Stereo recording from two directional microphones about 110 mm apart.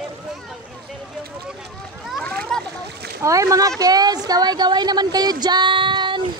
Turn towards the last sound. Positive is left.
turn(degrees=-45)  # may be behind; listen again after turning